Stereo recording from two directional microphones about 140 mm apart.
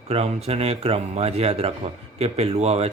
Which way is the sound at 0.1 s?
45° right (ahead or behind).